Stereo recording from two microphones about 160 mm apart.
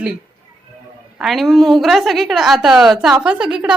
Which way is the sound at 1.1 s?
Centre (ahead or behind).